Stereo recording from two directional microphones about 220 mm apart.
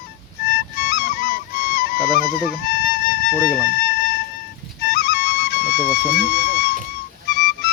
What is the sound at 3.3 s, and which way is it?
Speech, 5° left (ahead or behind).